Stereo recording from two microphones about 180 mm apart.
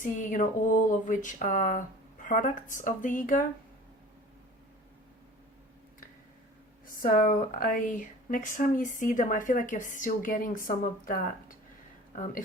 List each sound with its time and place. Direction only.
0.0 s speech: 45° left (ahead or behind)
6.8 s speech: 50° left (ahead or behind)